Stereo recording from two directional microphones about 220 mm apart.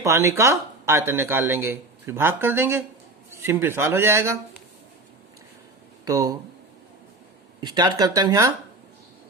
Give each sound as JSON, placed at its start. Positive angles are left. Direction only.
{"t": 0.0, "sound": "speech", "side_deg": -15}
{"t": 6.1, "sound": "speech", "side_deg": -15}
{"t": 7.6, "sound": "speech", "side_deg": -20}